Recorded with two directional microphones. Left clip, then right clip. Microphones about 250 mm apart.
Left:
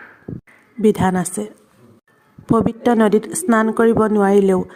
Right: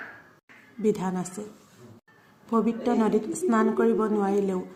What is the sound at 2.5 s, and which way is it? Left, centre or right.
A woman's voice, left.